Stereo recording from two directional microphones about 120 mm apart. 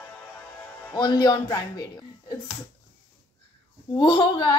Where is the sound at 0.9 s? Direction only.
35° left (ahead or behind).